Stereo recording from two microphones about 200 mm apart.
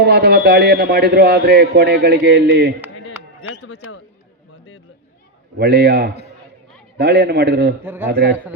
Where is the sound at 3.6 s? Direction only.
85° left.